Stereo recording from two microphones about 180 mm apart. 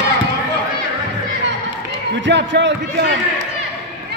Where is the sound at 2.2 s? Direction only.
75° right (ahead or behind).